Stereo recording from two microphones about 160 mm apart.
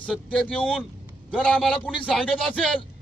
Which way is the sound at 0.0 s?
5° left (ahead or behind).